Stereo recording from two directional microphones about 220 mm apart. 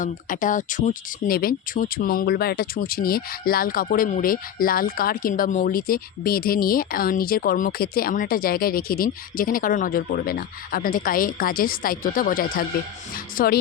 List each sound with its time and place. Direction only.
0.0 s speech: 35° left (ahead or behind)